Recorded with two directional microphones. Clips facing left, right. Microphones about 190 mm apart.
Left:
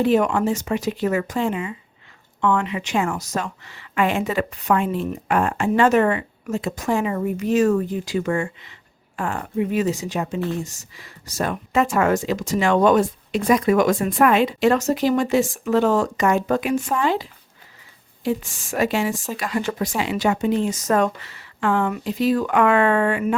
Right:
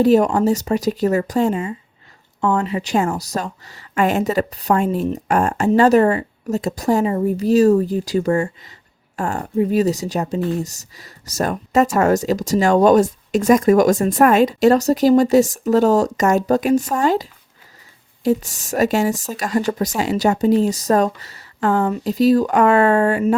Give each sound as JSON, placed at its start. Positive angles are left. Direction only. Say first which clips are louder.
{"t": 0.0, "sound": "speech", "louder": "right 4 dB", "side_deg": -40}